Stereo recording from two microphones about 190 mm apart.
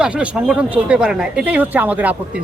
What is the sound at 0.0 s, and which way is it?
A man's voice, 5° right (ahead or behind).